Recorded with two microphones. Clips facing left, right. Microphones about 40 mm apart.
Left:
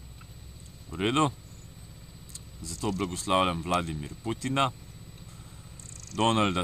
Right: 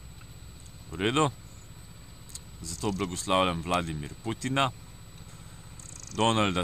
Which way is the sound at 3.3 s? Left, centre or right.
Centre.